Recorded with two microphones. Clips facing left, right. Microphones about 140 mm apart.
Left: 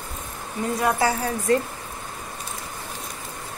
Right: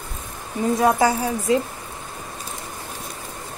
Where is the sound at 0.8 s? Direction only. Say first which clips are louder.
Right 4 dB; 20° right (ahead or behind).